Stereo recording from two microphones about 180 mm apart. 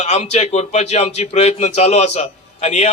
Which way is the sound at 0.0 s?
40° left (ahead or behind).